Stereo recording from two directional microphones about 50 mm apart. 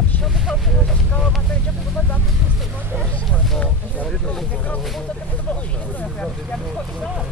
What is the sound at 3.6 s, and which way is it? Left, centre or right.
Speech, left.